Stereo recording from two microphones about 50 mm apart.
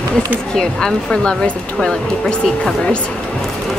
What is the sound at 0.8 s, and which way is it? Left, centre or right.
Speech, centre.